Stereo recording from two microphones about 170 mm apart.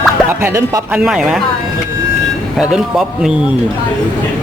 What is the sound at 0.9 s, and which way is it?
Speech, 5° right (ahead or behind).